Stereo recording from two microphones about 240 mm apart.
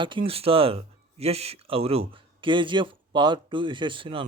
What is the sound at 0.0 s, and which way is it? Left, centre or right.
Speech, right.